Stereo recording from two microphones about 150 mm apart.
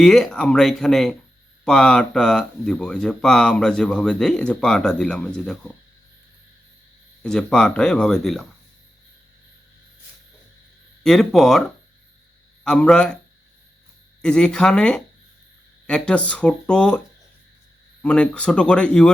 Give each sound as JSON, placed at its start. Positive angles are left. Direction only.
{"t": 0.0, "sound": "speech", "side_deg": 5}
{"t": 7.2, "sound": "speech", "side_deg": 5}
{"t": 11.0, "sound": "speech", "side_deg": 0}
{"t": 14.2, "sound": "speech", "side_deg": 5}
{"t": 18.0, "sound": "speech", "side_deg": 10}